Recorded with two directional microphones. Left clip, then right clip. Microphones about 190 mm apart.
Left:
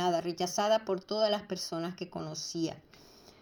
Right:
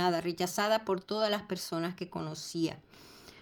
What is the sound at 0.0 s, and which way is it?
A woman's voice, 20° right (ahead or behind).